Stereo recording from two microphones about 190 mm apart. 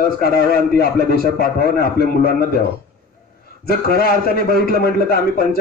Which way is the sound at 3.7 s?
50° left (ahead or behind).